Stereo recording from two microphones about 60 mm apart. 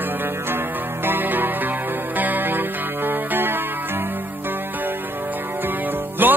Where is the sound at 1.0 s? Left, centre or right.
Right.